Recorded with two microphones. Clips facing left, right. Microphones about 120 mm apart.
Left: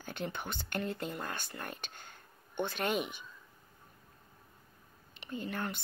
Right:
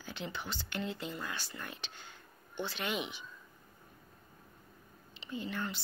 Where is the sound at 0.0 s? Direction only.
50° left (ahead or behind).